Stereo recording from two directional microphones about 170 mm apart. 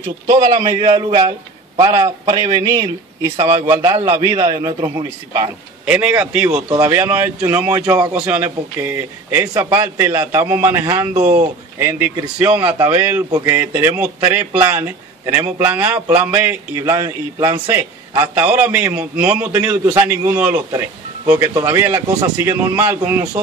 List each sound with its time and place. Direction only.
0.3 s speech: 20° right (ahead or behind)
0.7 s a man's voice: 30° right (ahead or behind)
5.9 s a man's voice: 5° right (ahead or behind)
6.7 s a man's voice: 20° right (ahead or behind)
8.1 s a man's voice: 10° right (ahead or behind)
19.8 s a man's voice: 20° right (ahead or behind)